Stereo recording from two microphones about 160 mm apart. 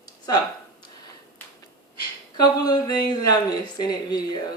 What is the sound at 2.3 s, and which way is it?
A woman's voice, 25° left (ahead or behind).